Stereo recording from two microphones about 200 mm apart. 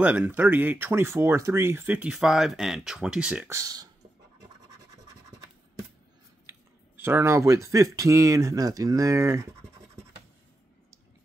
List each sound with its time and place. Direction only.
0.0 s speech: 5° right (ahead or behind)
7.0 s speech: 10° right (ahead or behind)